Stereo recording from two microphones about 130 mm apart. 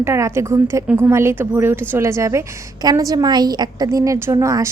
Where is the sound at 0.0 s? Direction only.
20° right (ahead or behind).